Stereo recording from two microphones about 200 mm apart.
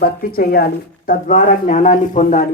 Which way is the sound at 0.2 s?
50° left (ahead or behind).